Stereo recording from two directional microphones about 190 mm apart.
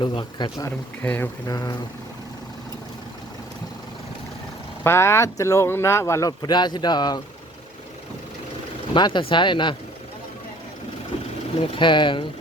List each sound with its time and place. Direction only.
0.0 s speech: 25° left (ahead or behind)
1.0 s speech: 10° left (ahead or behind)
1.5 s speech: 20° left (ahead or behind)
4.8 s speech: 15° left (ahead or behind)
8.9 s speech: 25° left (ahead or behind)
11.8 s speech: 25° left (ahead or behind)